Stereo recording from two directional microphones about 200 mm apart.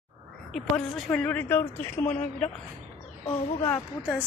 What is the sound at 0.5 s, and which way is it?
A woman's voice, 5° left (ahead or behind).